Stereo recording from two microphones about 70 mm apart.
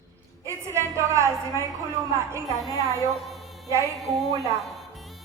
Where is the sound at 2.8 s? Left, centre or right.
Right.